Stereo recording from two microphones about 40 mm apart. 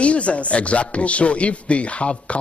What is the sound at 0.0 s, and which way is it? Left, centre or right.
A man's voice, left.